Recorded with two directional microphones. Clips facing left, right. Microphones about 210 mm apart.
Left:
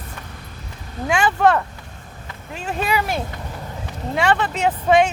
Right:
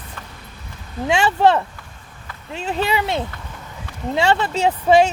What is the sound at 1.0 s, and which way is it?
Speech, 25° right (ahead or behind).